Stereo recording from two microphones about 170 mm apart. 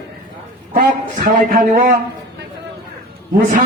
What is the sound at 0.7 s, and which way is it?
A man's voice, 50° right (ahead or behind).